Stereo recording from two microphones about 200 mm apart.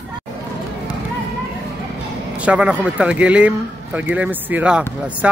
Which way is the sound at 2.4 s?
5° right (ahead or behind).